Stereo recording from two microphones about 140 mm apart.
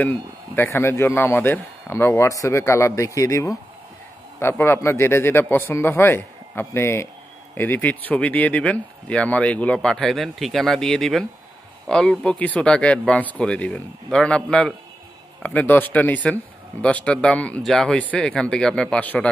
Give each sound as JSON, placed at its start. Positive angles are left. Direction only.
{"t": 0.0, "sound": "speech", "side_deg": 15}